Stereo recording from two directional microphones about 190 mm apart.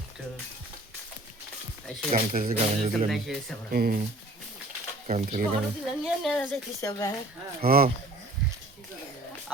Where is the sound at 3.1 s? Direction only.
Centre (ahead or behind).